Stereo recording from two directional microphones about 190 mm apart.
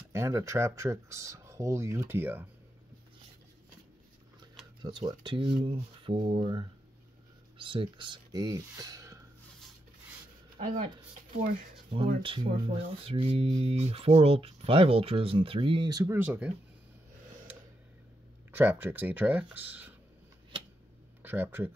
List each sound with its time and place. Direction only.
0.1 s speech: 15° right (ahead or behind)
4.8 s speech: 20° right (ahead or behind)
11.9 s speech: 25° right (ahead or behind); by 16.5 s 5° right (ahead or behind)
18.5 s speech: 10° right (ahead or behind)
21.2 s speech: 10° right (ahead or behind)